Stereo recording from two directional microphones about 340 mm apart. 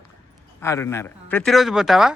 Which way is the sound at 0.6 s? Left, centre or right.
Centre.